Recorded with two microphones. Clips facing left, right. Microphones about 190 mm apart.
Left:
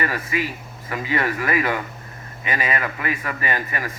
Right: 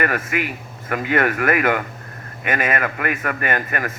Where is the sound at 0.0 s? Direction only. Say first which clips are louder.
Right 3 dB; 60° right (ahead or behind).